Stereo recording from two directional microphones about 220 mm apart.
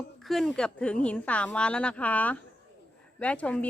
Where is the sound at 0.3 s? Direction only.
Centre (ahead or behind).